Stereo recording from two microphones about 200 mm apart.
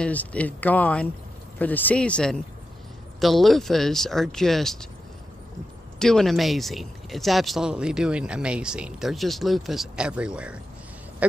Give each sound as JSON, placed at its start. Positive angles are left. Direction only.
{"t": 0.0, "sound": "speech", "side_deg": 5}
{"t": 5.9, "sound": "speech", "side_deg": 0}